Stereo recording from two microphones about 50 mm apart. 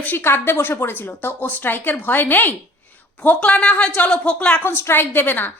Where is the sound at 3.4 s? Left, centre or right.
Left.